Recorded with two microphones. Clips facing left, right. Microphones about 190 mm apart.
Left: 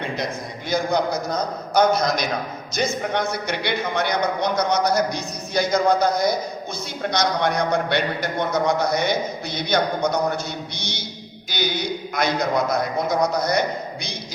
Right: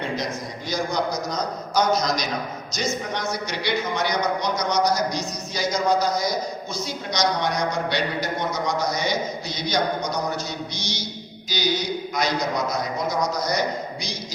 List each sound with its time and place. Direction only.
0.7 s speech: 55° left (ahead or behind)